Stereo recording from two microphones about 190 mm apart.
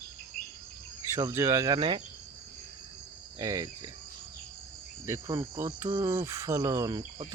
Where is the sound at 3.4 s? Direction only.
20° right (ahead or behind).